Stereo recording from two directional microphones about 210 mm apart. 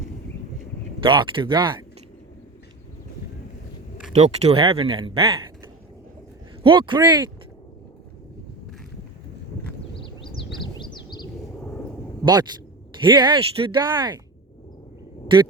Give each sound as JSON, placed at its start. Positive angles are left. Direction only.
{"t": 1.0, "sound": "speech", "side_deg": -25}
{"t": 4.1, "sound": "speech", "side_deg": -30}
{"t": 6.6, "sound": "speech", "side_deg": -25}
{"t": 9.9, "sound": "a sound", "side_deg": 25}
{"t": 11.6, "sound": "a sound", "side_deg": 5}
{"t": 12.2, "sound": "speech", "side_deg": -20}